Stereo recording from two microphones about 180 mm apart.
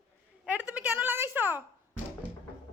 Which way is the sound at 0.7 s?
10° right (ahead or behind).